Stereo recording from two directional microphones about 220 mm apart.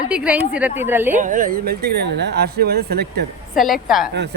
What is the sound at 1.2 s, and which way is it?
Speech, 35° right (ahead or behind).